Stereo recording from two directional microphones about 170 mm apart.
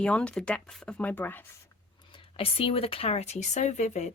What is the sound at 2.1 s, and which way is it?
Speech, 35° left (ahead or behind).